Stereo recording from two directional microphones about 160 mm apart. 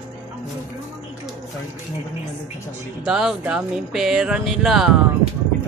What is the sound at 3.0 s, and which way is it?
Speech, 5° right (ahead or behind).